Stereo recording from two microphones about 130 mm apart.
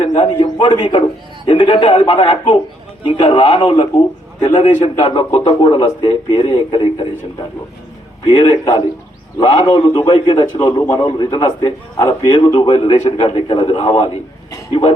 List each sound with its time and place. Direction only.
0.0 s a man's voice: 40° left (ahead or behind)
4.8 s speech: 45° left (ahead or behind)
8.3 s a man's voice: 50° left (ahead or behind)